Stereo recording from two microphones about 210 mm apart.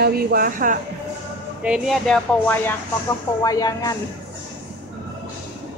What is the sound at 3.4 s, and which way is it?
Speech, 15° left (ahead or behind).